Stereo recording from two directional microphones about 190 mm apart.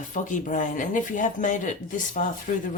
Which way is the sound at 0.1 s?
40° left (ahead or behind).